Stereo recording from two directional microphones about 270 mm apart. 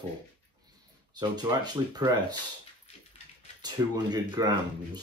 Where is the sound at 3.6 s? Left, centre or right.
Centre.